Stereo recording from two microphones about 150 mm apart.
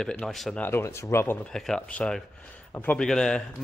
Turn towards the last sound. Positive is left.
turn(degrees=5)  # may be behind; listen again after turning